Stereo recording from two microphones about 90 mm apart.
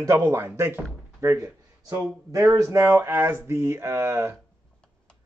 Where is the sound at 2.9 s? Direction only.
25° right (ahead or behind).